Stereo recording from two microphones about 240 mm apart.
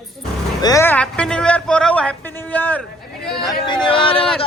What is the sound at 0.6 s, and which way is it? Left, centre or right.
A woman's voice, centre.